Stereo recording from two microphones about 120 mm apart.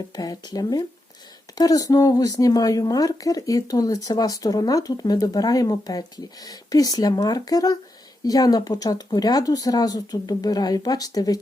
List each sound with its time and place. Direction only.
0.2 s speech: 30° left (ahead or behind)